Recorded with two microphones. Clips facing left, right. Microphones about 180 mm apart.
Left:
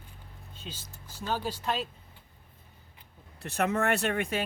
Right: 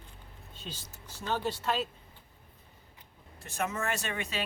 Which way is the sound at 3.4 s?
65° left (ahead or behind).